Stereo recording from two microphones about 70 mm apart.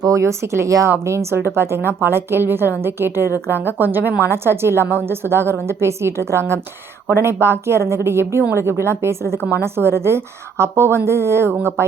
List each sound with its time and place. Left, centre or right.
0.0 s a woman's voice: right